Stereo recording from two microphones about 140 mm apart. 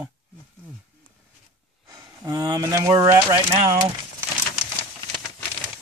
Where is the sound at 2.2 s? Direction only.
25° right (ahead or behind).